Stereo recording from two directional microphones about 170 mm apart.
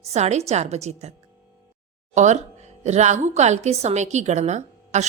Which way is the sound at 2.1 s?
45° right (ahead or behind).